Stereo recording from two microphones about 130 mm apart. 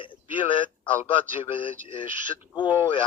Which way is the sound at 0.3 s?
40° left (ahead or behind).